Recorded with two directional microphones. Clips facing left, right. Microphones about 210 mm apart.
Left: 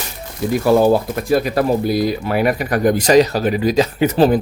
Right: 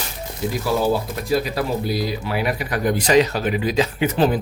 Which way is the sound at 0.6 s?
55° left (ahead or behind).